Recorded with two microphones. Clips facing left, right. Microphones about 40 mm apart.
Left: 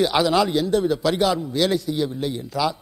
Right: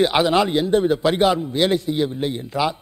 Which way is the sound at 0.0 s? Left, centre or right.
Right.